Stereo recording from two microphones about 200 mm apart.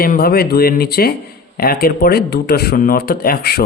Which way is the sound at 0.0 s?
50° left (ahead or behind).